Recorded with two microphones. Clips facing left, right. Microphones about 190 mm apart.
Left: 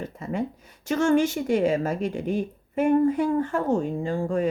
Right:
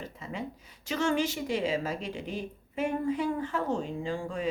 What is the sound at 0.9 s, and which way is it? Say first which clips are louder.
A woman's voice: left 7 dB; 50° left (ahead or behind).